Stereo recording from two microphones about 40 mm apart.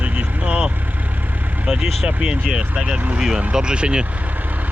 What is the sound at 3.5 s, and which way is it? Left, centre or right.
Speech, right.